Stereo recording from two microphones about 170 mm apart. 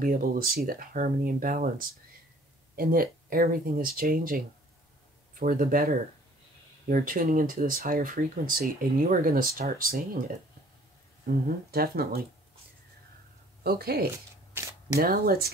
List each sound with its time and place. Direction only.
0.0 s speech: 55° right (ahead or behind)
5.4 s speech: 55° right (ahead or behind)
11.2 s speech: 60° right (ahead or behind)
13.7 s speech: 65° right (ahead or behind)
14.5 s speech: 15° right (ahead or behind)
15.0 s speech: 60° right (ahead or behind)